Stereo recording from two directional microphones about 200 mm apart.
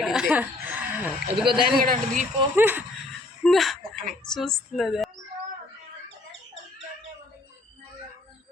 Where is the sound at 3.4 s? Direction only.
Centre (ahead or behind).